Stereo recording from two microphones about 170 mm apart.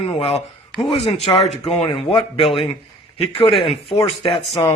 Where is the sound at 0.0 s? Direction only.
35° left (ahead or behind).